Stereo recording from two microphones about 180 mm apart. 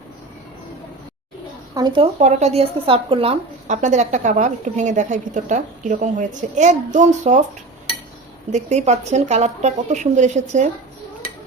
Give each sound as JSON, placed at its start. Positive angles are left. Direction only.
{"t": 1.7, "sound": "a woman's voice", "side_deg": -25}
{"t": 2.1, "sound": "a woman's voice", "side_deg": -40}
{"t": 8.5, "sound": "a woman's voice", "side_deg": -40}